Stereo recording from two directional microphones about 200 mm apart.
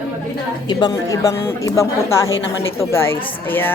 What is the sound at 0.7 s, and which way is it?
A woman's voice, 20° left (ahead or behind).